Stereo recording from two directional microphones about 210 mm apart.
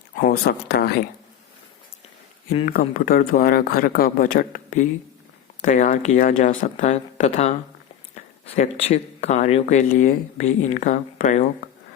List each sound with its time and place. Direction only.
0.2 s speech: 45° left (ahead or behind)
2.5 s speech: 35° left (ahead or behind)